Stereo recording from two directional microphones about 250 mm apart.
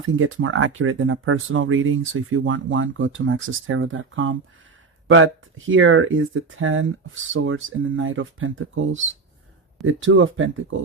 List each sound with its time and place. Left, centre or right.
0.2 s speech: right